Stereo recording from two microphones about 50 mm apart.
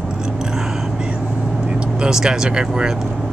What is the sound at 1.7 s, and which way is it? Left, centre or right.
Speech, centre.